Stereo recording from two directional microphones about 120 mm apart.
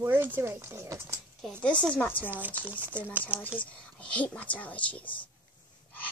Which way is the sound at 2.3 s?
15° right (ahead or behind).